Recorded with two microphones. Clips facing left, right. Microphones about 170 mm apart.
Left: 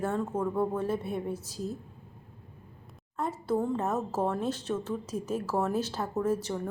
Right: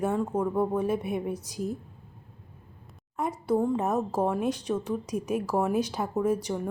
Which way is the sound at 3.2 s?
15° right (ahead or behind).